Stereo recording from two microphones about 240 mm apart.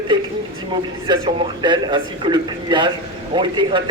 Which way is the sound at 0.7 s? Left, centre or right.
Centre.